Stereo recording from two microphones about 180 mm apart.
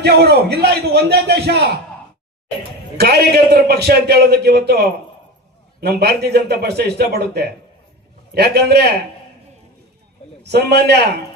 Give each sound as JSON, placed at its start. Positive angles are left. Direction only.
{"t": 0.0, "sound": "a man's voice", "side_deg": -65}
{"t": 3.0, "sound": "a man's voice", "side_deg": -60}
{"t": 10.4, "sound": "a man's voice", "side_deg": -65}